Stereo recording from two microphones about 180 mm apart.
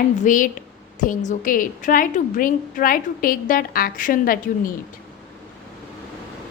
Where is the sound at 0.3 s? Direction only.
45° left (ahead or behind).